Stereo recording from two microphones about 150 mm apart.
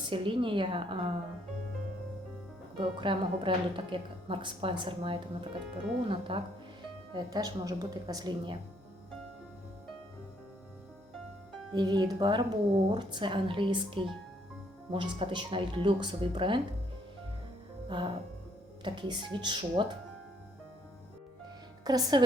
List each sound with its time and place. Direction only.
0.1 s a woman's voice: 35° right (ahead or behind)
2.7 s a woman's voice: 35° right (ahead or behind)
11.7 s a woman's voice: 30° right (ahead or behind)
17.8 s music: 30° right (ahead or behind)
18.9 s a woman's voice: 30° right (ahead or behind)
21.8 s speech: 25° right (ahead or behind)